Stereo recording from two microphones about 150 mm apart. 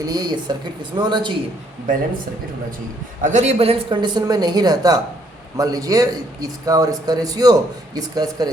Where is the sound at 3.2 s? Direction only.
55° right (ahead or behind).